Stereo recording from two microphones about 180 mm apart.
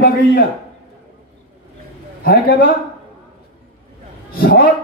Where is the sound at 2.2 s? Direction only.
55° left (ahead or behind).